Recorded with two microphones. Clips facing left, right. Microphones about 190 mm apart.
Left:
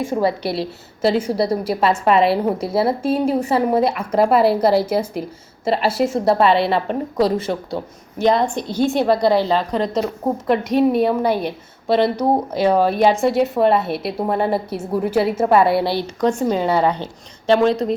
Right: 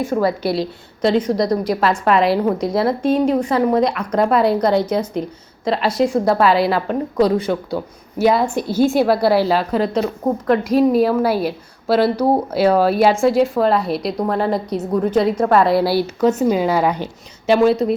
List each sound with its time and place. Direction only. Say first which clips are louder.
0.1 s a woman's voice: right 1 dB; 20° left (ahead or behind)
0.4 s a woman's voice: right 3 dB; centre (ahead or behind)
12.8 s a woman's voice: right 1 dB; 5° right (ahead or behind)